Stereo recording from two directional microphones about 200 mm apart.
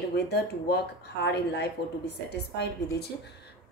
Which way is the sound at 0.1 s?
55° left (ahead or behind).